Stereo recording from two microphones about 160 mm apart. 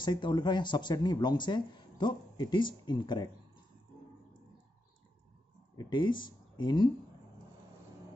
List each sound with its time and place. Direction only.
0.0 s speech: 30° left (ahead or behind)
5.8 s speech: 30° left (ahead or behind)